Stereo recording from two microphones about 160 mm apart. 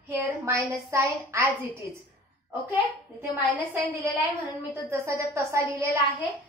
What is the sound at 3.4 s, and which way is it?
A woman's voice, 10° right (ahead or behind).